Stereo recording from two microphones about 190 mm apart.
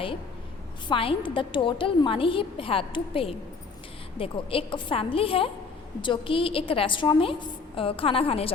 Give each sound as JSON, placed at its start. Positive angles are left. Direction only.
{"t": 0.9, "sound": "a woman's voice", "side_deg": 25}